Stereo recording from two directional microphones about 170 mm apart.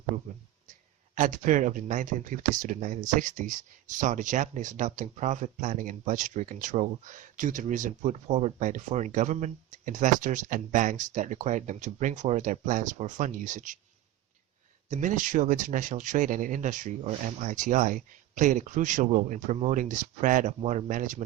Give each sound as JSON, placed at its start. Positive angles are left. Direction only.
{"t": 1.1, "sound": "speech", "side_deg": -50}
{"t": 14.8, "sound": "speech", "side_deg": -45}